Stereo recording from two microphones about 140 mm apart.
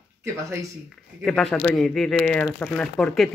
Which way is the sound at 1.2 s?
5° left (ahead or behind).